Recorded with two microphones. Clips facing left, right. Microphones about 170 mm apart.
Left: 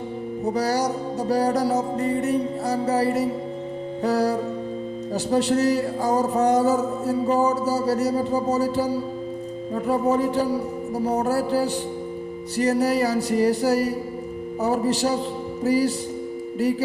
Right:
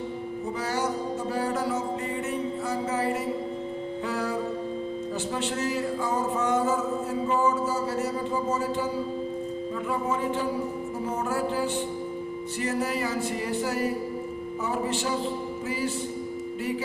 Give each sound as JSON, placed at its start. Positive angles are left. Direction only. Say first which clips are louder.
{"t": 0.4, "sound": "speech", "louder": "left 7 dB", "side_deg": 40}